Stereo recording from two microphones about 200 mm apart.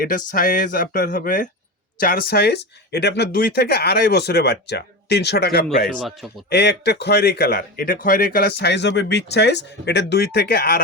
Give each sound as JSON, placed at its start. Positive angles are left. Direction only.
{"t": 0.3, "sound": "speech", "side_deg": 45}
{"t": 6.0, "sound": "speech", "side_deg": 0}
{"t": 6.5, "sound": "speech", "side_deg": 55}